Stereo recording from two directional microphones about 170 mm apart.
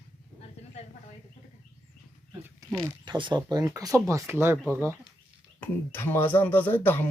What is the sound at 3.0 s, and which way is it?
Speech, 25° right (ahead or behind).